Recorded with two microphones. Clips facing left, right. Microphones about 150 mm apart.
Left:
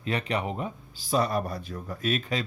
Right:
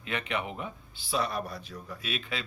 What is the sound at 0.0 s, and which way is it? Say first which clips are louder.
Speech: left 4 dB; 35° left (ahead or behind).